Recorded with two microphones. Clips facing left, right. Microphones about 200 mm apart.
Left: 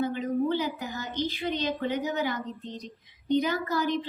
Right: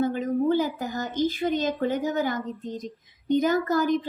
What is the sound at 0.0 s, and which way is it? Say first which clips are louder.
A woman's voice: right 3 dB; 45° right (ahead or behind).